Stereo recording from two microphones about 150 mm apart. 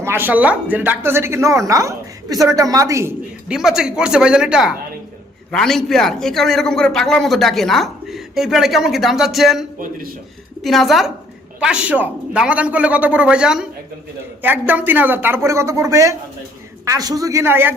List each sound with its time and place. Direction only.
0.0 s speech: 15° right (ahead or behind)
3.5 s a man's voice: 5° right (ahead or behind)
14.7 s speech: 10° right (ahead or behind)